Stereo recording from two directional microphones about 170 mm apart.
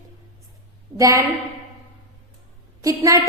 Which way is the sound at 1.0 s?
20° right (ahead or behind).